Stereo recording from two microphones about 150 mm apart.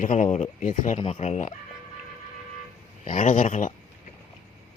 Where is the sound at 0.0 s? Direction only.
55° left (ahead or behind).